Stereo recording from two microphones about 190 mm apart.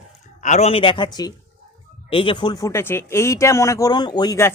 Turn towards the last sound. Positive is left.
turn(degrees=15)  # may be behind; listen again after turning